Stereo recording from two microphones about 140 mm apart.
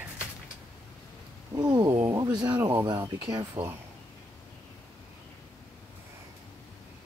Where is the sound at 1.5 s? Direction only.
30° right (ahead or behind).